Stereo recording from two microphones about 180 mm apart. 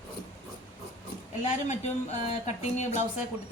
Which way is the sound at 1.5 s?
40° left (ahead or behind).